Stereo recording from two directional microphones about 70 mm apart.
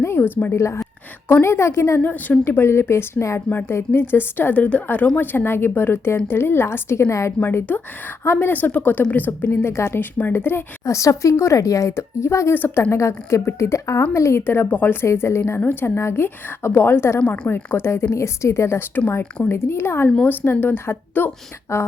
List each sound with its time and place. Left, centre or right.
0.0 s a woman's voice: left
0.5 s a woman's voice: left
2.0 s a woman's voice: left
7.3 s a woman's voice: left
10.8 s a woman's voice: left
15.0 s a woman's voice: left
18.9 s a woman's voice: left